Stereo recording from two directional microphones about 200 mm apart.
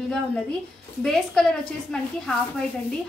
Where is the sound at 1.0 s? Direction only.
Centre (ahead or behind).